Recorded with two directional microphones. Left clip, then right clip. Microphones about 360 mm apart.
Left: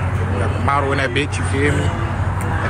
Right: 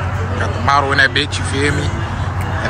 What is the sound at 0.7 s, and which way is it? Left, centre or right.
Speech, centre.